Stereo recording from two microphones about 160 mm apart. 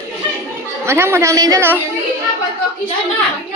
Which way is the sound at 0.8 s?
15° right (ahead or behind).